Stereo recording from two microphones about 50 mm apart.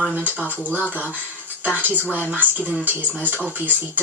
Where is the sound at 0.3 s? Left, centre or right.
Right.